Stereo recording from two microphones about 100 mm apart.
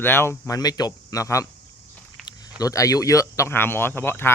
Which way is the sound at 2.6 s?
35° left (ahead or behind).